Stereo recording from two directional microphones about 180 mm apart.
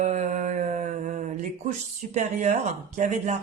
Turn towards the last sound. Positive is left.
turn(degrees=-45)  # may be behind; listen again after turning